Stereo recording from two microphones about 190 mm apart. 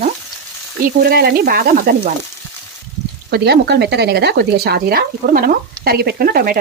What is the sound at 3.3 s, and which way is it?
Speech, 60° right (ahead or behind).